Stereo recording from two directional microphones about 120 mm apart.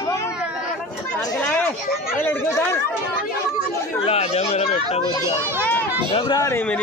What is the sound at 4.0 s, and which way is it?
Speech, 60° left (ahead or behind).